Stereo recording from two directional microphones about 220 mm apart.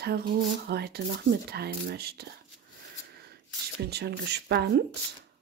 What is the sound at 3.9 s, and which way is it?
Speech, 50° right (ahead or behind).